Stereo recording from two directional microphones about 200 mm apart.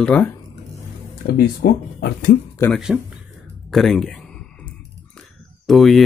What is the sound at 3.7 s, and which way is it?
Clicking, centre (ahead or behind).